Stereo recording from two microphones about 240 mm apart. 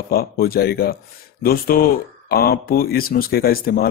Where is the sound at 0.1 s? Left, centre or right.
Left.